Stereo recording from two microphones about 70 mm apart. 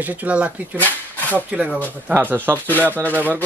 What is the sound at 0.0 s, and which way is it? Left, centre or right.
Speech, right.